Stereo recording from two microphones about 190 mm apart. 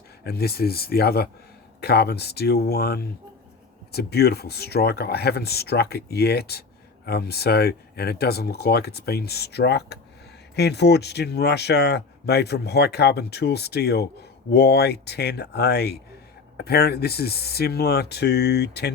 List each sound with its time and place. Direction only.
0.3 s speech: 55° left (ahead or behind)